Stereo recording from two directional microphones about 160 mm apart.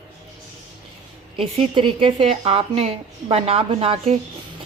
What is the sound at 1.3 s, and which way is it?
A woman's voice, 35° right (ahead or behind).